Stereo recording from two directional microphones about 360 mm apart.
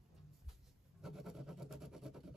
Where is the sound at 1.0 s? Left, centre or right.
Centre.